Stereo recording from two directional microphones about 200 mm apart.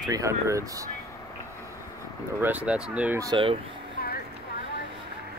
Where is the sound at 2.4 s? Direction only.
5° right (ahead or behind); by 3.5 s 20° right (ahead or behind).